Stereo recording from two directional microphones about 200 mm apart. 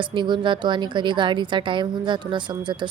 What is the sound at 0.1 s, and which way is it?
A woman's voice, 25° right (ahead or behind).